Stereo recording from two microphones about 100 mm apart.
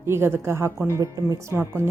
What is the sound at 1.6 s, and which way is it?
Speech, 25° right (ahead or behind).